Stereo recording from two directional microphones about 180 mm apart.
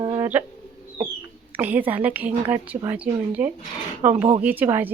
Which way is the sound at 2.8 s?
20° right (ahead or behind).